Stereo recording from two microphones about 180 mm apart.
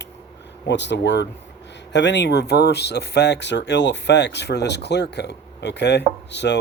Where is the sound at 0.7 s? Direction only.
75° left (ahead or behind).